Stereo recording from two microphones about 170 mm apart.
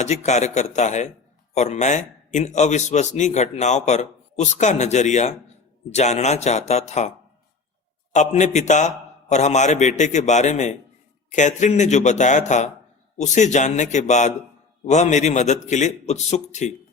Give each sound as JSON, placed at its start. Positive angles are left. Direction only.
{"t": 0.0, "sound": "a man's voice", "side_deg": 40}
{"t": 8.1, "sound": "a man's voice", "side_deg": 45}